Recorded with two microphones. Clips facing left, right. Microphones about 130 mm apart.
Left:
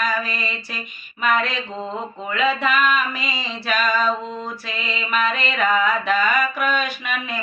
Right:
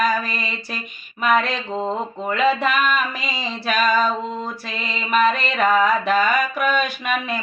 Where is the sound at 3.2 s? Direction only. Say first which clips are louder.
Right 1 dB; 5° right (ahead or behind).